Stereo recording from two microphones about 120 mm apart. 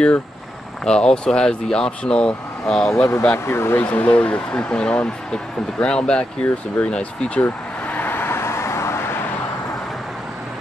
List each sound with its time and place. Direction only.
0.8 s speech: 5° left (ahead or behind)
3.1 s speech: 20° left (ahead or behind)